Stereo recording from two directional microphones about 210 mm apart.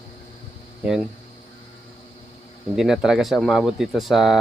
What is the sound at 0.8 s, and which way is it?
Speech, 5° right (ahead or behind).